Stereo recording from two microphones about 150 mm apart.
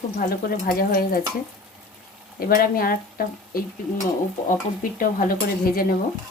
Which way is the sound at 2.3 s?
75° left (ahead or behind).